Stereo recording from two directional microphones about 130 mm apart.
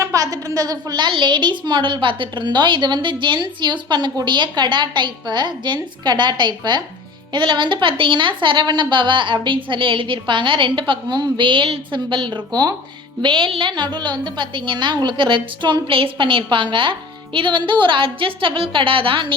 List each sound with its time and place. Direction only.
0.0 s a woman's voice: 25° right (ahead or behind); by 19.3 s 40° right (ahead or behind)